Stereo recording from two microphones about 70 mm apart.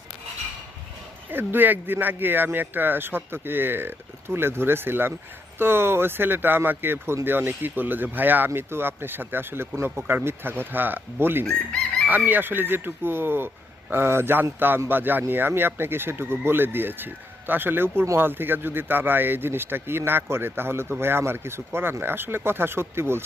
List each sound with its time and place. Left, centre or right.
1.3 s speech: right
11.4 s chicken: centre
12.0 s speech: right